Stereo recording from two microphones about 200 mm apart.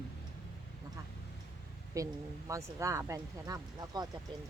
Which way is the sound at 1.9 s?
15° right (ahead or behind).